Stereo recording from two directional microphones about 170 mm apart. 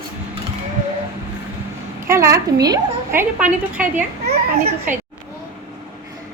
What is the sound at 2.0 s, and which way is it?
A woman's voice, 15° right (ahead or behind).